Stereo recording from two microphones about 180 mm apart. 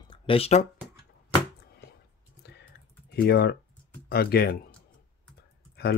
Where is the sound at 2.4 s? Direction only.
65° left (ahead or behind).